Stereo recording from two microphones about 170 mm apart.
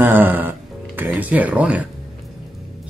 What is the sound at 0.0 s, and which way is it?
Music, 10° right (ahead or behind).